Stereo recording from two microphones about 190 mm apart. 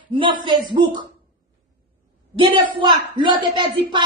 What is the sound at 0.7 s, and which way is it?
Speech, 25° right (ahead or behind).